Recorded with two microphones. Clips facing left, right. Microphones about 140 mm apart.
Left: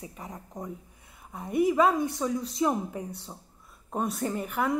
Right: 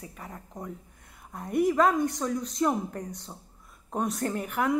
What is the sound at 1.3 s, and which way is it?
Speech, 5° left (ahead or behind).